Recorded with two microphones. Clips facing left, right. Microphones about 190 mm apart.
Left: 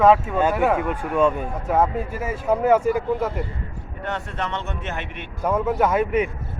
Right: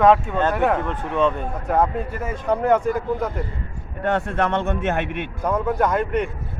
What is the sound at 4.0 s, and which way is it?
A man's voice, 50° right (ahead or behind).